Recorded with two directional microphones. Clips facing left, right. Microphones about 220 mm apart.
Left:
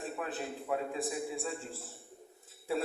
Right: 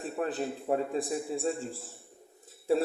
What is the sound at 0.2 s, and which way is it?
Music, 40° right (ahead or behind).